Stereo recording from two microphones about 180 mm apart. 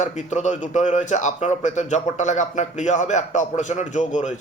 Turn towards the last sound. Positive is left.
turn(degrees=40)  # may be behind; listen again after turning